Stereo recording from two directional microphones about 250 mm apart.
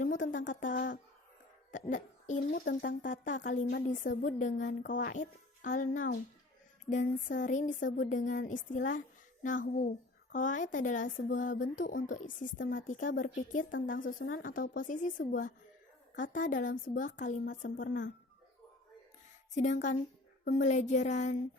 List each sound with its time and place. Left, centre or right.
0.0 s a sound: left
0.7 s a woman's voice: left
1.7 s a child's voice: left
12.4 s a woman's voice: left
12.7 s speech: left
17.4 s a woman's voice: left
17.7 s speech: left
19.5 s speech: left